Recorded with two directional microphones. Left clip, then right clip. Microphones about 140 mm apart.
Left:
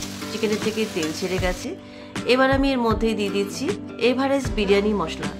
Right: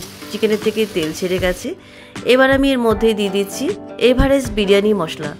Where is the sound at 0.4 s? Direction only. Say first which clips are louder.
Right 7 dB; 45° right (ahead or behind).